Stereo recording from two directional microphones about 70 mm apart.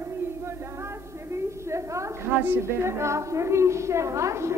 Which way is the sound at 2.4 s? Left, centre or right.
Right.